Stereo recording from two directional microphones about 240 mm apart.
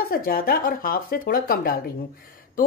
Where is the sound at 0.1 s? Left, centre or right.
Left.